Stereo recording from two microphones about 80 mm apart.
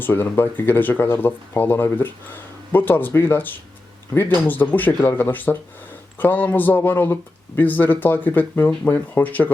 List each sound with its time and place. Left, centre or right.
0.0 s speech: left
4.4 s speech: left